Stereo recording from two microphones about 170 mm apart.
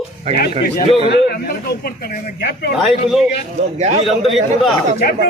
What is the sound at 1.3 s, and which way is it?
Speech, 65° left (ahead or behind).